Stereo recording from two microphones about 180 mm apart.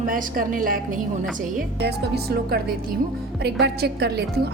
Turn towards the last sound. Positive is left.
turn(degrees=-65)  # may be behind; listen again after turning